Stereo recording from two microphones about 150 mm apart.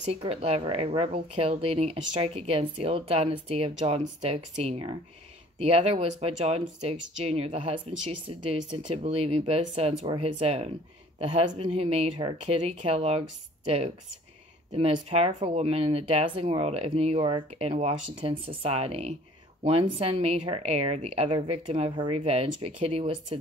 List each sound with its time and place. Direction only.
0.1 s speech: 40° right (ahead or behind)
14.7 s speech: 45° right (ahead or behind)
17.6 s speech: 45° right (ahead or behind)